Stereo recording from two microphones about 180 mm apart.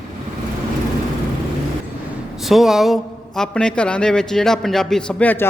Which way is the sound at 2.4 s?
Centre (ahead or behind).